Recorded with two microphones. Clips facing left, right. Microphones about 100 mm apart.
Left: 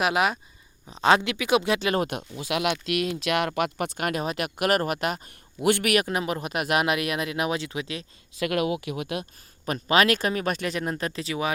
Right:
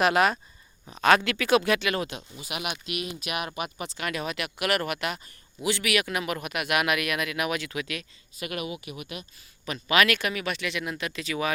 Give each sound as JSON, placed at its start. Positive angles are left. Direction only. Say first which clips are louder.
{"t": 0.0, "sound": "speech", "louder": "right 1 dB", "side_deg": 10}
{"t": 0.9, "sound": "speech", "louder": "left 1 dB", "side_deg": 20}
{"t": 1.8, "sound": "a man's voice", "louder": "left 4 dB", "side_deg": 35}
{"t": 2.4, "sound": "speech", "louder": "left 9 dB", "side_deg": 85}
{"t": 5.6, "sound": "a man's voice", "louder": "left 5 dB", "side_deg": 50}
{"t": 8.4, "sound": "speech", "louder": "left 8 dB", "side_deg": 90}
{"t": 9.6, "sound": "a man's voice", "louder": "left 2 dB", "side_deg": 40}